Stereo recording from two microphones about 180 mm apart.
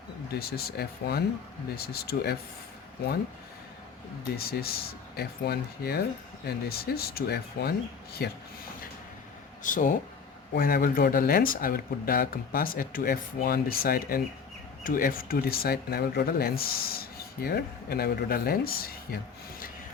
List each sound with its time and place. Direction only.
0.3 s speech: 60° left (ahead or behind)
4.4 s speech: 55° left (ahead or behind)
9.6 s speech: 45° left (ahead or behind)